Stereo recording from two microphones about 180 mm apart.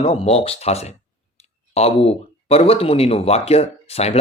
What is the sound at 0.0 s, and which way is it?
Speech, 35° left (ahead or behind).